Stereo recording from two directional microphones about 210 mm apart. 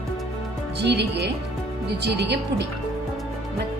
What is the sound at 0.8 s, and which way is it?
A woman's voice, 55° right (ahead or behind).